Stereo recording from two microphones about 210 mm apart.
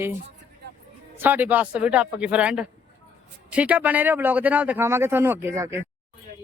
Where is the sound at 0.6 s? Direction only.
55° right (ahead or behind).